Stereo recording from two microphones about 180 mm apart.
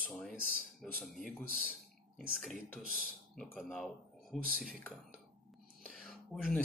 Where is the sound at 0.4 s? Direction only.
55° right (ahead or behind).